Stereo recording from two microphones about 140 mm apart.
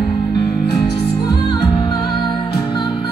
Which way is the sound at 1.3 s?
35° left (ahead or behind).